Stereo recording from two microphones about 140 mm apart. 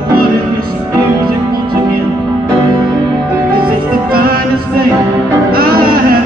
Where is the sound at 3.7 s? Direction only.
90° right.